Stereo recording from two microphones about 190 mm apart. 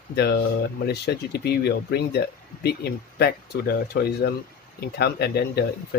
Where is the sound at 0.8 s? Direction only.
55° left (ahead or behind).